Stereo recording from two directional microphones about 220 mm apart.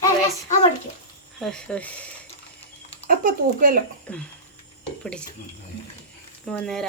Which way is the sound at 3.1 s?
40° right (ahead or behind).